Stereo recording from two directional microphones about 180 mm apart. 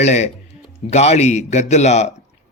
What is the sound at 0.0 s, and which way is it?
A man's voice, 40° left (ahead or behind).